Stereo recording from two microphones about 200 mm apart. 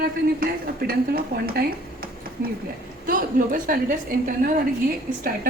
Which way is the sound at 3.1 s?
45° right (ahead or behind).